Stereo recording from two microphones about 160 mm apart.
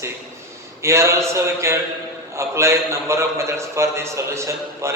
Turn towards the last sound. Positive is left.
turn(degrees=-15)  # may be behind; listen again after turning